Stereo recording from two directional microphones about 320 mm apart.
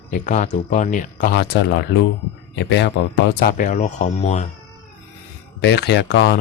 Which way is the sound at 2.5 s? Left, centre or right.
Left.